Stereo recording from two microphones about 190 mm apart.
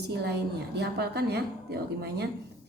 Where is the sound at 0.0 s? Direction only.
60° right (ahead or behind).